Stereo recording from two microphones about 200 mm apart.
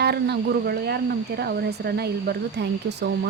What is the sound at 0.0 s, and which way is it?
A woman's voice, 55° right (ahead or behind).